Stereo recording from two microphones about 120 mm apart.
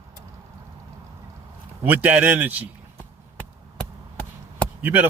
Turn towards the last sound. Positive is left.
turn(degrees=-15)  # may be behind; listen again after turning